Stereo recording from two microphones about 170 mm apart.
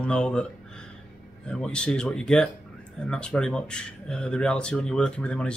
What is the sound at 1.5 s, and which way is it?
Speech, 5° left (ahead or behind).